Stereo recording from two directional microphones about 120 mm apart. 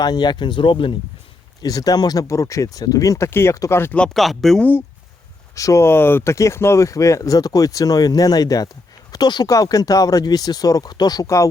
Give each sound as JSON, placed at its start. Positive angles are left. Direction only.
{"t": 0.0, "sound": "speech", "side_deg": 35}
{"t": 1.6, "sound": "speech", "side_deg": 30}
{"t": 4.0, "sound": "speech", "side_deg": 0}
{"t": 5.5, "sound": "speech", "side_deg": 25}